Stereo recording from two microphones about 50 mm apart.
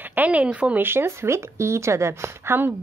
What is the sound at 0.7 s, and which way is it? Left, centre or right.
A woman's voice, right.